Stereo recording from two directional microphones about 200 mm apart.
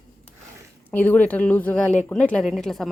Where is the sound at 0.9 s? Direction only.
10° left (ahead or behind).